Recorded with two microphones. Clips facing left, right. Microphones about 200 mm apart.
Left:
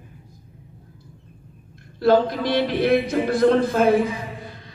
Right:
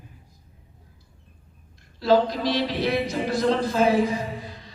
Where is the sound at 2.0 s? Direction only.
55° left (ahead or behind).